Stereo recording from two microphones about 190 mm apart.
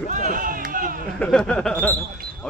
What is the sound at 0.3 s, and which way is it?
Run, 45° right (ahead or behind).